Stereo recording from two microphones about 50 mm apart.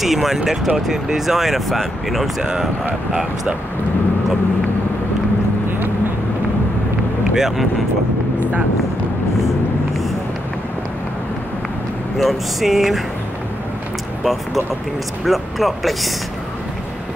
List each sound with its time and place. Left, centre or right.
0.0 s speech: centre
7.3 s speech: centre
12.2 s speech: centre
14.2 s speech: centre